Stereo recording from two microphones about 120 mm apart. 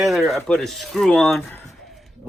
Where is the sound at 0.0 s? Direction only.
Centre (ahead or behind).